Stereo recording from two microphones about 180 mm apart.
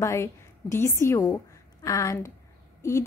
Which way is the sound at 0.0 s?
15° left (ahead or behind).